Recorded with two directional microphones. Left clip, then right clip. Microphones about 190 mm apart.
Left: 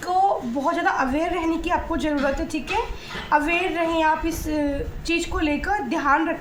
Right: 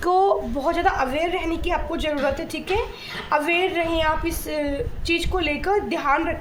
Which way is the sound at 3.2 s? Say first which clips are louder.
Even; 45° right (ahead or behind).